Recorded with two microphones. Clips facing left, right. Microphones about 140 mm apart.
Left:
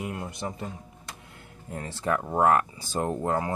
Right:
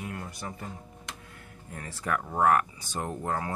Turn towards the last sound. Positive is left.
turn(degrees=25)  # may be behind; listen again after turning